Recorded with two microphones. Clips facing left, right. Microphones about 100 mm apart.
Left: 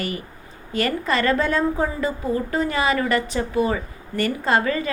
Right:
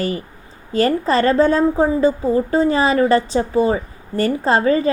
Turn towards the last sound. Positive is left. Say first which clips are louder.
# right 5 dB
turn(degrees=-30)  # may be behind; listen again after turning